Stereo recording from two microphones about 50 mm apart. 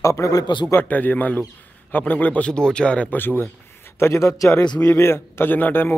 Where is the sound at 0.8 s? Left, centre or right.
Left.